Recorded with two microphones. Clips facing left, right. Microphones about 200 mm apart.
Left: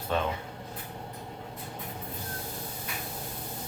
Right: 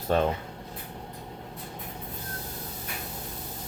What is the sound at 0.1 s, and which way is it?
Speech, 45° right (ahead or behind).